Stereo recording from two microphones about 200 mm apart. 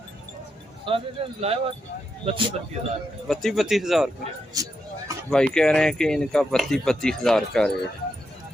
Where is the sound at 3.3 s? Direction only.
Centre (ahead or behind).